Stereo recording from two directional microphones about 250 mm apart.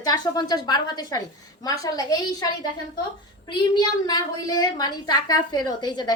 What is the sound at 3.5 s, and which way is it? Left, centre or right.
A woman's voice, centre.